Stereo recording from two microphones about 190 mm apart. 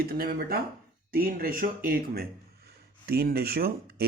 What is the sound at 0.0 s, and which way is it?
A man's voice, 50° right (ahead or behind).